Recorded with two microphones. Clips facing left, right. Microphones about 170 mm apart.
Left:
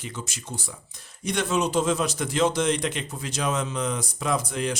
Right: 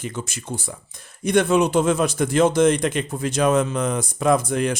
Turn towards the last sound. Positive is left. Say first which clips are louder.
# right 7 dB
turn(degrees=-55)  # may be behind; listen again after turning